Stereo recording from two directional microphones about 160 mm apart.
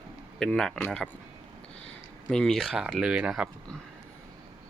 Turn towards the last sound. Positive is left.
turn(degrees=-5)  # may be behind; listen again after turning